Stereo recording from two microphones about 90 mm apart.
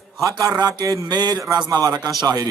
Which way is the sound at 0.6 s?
45° right (ahead or behind).